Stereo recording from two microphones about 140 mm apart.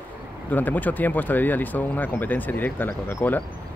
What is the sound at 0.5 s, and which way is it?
Speech, 10° left (ahead or behind).